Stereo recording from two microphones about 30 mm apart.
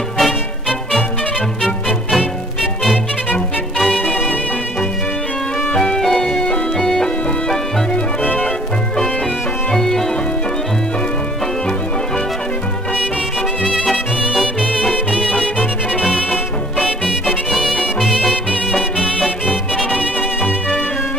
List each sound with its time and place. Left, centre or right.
0.2 s music: centre
2.0 s music: centre
4.0 s music: left
5.9 s music: centre
9.7 s music: centre
16.0 s music: right
17.5 s music: centre
19.2 s music: right